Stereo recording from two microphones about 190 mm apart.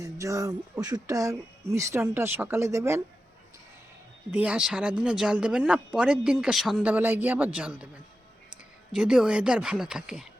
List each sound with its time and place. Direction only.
0.0 s speech: 15° right (ahead or behind)
4.3 s speech: 5° right (ahead or behind)
8.9 s speech: 5° right (ahead or behind)